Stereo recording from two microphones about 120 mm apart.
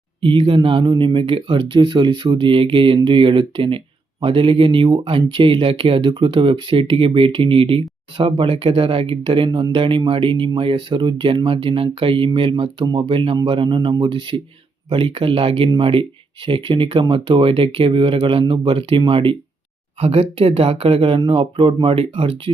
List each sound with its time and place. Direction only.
0.2 s speech: 45° right (ahead or behind)
12.8 s speech: 30° right (ahead or behind)
13.1 s speech: 45° right (ahead or behind)